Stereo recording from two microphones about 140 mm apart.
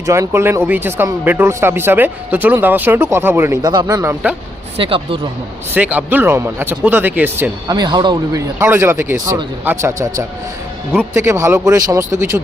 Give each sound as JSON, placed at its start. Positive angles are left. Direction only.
{"t": 0.0, "sound": "speech", "side_deg": -20}
{"t": 3.6, "sound": "speech", "side_deg": -30}
{"t": 4.8, "sound": "speech", "side_deg": -40}
{"t": 5.7, "sound": "speech", "side_deg": -10}
{"t": 7.7, "sound": "speech", "side_deg": -30}